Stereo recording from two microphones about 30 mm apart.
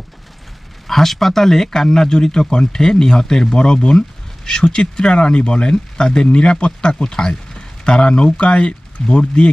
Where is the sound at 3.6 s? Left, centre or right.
Left.